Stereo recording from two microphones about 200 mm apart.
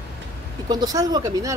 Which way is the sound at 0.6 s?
20° right (ahead or behind).